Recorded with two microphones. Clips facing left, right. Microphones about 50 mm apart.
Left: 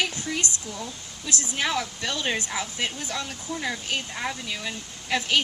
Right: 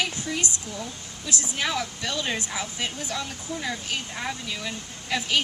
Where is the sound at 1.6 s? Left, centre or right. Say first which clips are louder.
Left 2 dB; centre.